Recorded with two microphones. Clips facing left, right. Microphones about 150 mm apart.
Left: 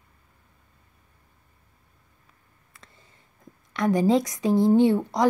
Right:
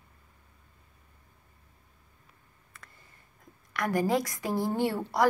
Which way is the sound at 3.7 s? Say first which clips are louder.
Left 6 dB; 25° left (ahead or behind).